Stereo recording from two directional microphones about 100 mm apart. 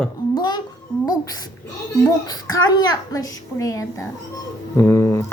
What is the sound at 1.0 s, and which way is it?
A child's voice, 40° left (ahead or behind).